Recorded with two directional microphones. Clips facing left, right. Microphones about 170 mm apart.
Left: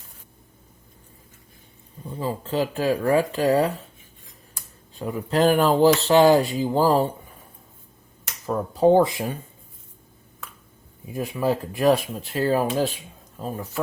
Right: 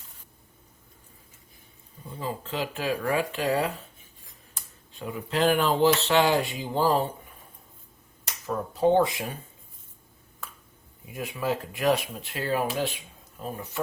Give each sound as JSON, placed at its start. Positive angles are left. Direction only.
{"t": 2.1, "sound": "speech", "side_deg": 35}
{"t": 4.9, "sound": "speech", "side_deg": 40}
{"t": 8.4, "sound": "speech", "side_deg": 35}
{"t": 11.1, "sound": "speech", "side_deg": 35}